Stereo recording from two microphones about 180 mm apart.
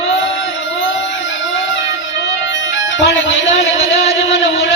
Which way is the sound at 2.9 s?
90° left.